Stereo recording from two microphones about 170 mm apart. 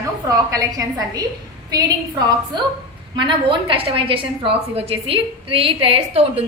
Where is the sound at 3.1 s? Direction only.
30° right (ahead or behind).